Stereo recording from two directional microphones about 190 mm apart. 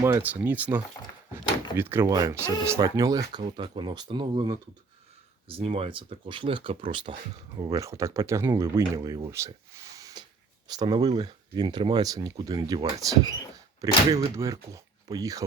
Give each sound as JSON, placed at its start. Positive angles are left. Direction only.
{"t": 0.0, "sound": "speech", "side_deg": -10}